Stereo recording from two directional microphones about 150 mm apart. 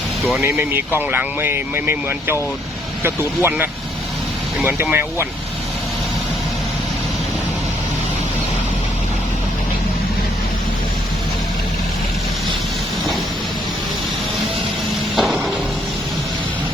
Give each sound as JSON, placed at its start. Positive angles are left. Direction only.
{"t": 0.4, "sound": "speech", "side_deg": -20}
{"t": 15.1, "sound": "music", "side_deg": 0}